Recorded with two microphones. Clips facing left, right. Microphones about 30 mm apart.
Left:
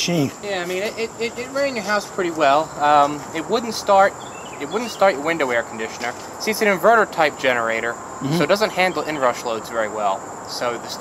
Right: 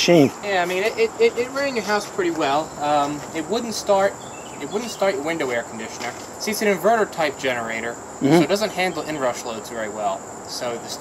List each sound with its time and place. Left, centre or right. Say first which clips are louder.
0.0 s speech: right 6 dB; centre